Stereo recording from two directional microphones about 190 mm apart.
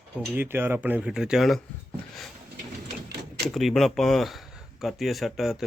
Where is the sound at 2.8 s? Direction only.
60° right (ahead or behind).